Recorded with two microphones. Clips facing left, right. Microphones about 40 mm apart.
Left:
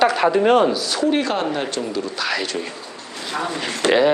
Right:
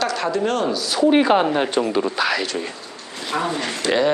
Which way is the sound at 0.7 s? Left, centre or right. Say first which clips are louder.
Right 2 dB; centre.